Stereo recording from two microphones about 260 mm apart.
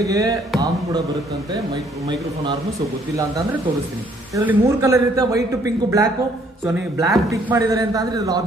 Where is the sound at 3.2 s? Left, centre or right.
Centre.